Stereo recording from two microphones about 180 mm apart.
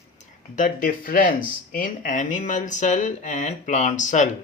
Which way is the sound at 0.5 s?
45° left (ahead or behind).